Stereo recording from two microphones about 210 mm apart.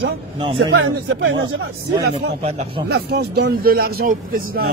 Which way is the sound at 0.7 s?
70° right (ahead or behind).